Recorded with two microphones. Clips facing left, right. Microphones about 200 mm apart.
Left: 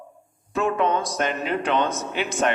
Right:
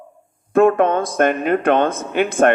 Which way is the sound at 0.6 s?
55° right (ahead or behind).